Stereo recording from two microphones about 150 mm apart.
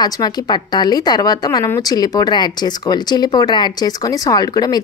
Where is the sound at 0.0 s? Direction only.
25° left (ahead or behind).